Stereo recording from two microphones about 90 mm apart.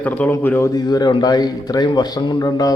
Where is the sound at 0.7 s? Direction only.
50° left (ahead or behind).